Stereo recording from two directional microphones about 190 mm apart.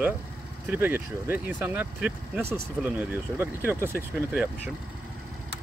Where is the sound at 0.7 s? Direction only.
10° right (ahead or behind).